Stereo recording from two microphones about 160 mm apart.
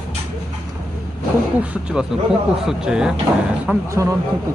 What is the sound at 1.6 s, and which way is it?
Speech, 10° right (ahead or behind).